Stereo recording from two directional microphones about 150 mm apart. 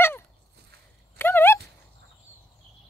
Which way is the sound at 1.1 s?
15° left (ahead or behind).